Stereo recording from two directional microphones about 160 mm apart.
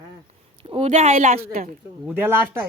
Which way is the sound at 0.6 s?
35° right (ahead or behind).